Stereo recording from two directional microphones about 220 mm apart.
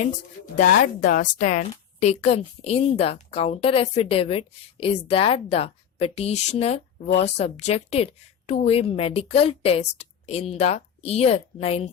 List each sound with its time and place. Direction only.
0.5 s a woman's voice: 35° left (ahead or behind)